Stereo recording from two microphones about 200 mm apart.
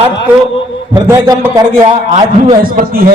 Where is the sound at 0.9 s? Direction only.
20° right (ahead or behind).